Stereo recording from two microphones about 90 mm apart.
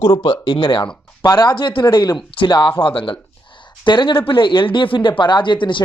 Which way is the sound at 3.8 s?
60° left (ahead or behind).